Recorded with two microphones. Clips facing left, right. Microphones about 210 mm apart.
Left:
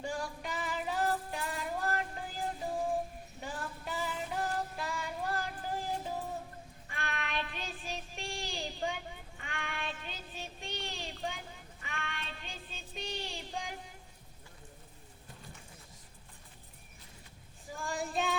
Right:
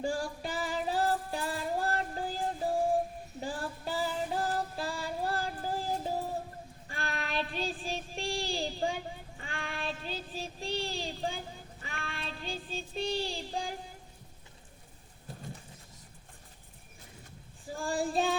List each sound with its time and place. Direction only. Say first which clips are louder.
0.0 s music: right 5 dB; 30° right (ahead or behind)
3.4 s child singing: right 5 dB; 30° right (ahead or behind)
17.7 s child singing: right 6 dB; 30° right (ahead or behind)